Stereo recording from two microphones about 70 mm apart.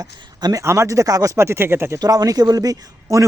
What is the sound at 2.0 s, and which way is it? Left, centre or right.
Speech, right.